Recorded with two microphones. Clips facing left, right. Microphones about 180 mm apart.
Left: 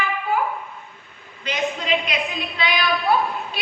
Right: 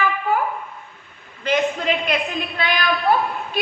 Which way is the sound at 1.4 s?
50° right (ahead or behind).